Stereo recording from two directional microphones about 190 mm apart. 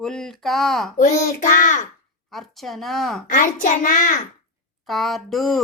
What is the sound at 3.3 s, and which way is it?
Speech, 45° left (ahead or behind).